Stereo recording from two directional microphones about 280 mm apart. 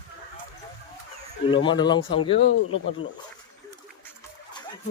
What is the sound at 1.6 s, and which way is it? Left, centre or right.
Speech, centre.